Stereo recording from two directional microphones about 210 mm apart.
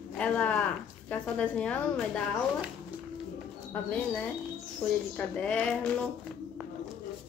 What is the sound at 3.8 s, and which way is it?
Speech, 5° left (ahead or behind).